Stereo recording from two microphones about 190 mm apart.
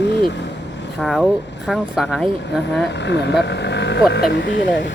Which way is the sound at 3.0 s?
65° left (ahead or behind).